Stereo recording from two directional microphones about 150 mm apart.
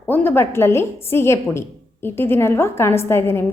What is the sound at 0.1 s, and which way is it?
A woman's voice, 15° left (ahead or behind).